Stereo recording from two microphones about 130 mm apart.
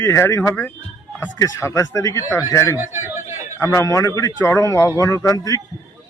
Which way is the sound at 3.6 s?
25° left (ahead or behind).